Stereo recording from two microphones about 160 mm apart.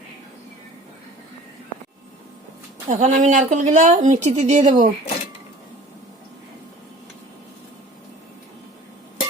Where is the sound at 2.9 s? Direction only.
50° right (ahead or behind).